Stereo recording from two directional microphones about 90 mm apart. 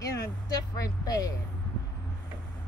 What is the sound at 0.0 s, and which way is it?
Vehicle, 40° left (ahead or behind).